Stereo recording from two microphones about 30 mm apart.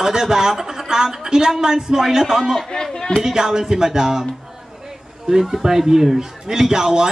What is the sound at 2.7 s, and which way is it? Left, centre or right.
Speech, left.